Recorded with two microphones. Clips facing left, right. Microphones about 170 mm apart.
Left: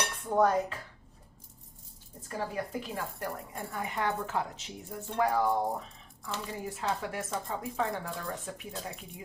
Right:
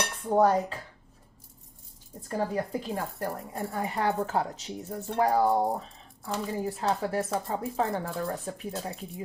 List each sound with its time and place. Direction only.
0.3 s speech: 30° right (ahead or behind)
2.3 s speech: 35° right (ahead or behind)